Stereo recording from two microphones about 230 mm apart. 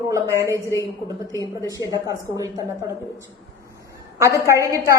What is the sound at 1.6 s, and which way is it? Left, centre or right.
Speech, centre.